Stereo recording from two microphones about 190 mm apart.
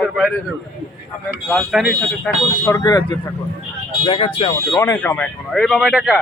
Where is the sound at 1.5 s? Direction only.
Centre (ahead or behind).